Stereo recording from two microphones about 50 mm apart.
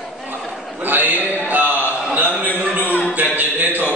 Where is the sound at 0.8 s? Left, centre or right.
Right.